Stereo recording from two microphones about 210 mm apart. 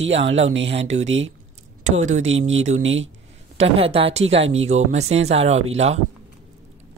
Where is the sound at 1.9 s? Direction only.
35° right (ahead or behind).